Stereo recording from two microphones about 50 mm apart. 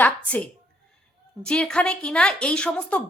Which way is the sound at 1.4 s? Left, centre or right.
Centre.